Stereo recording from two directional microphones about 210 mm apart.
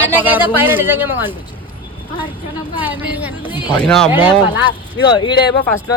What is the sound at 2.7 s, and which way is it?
Speech, 10° right (ahead or behind).